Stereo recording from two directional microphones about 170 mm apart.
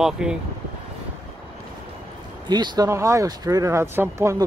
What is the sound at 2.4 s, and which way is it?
Speech, 25° right (ahead or behind).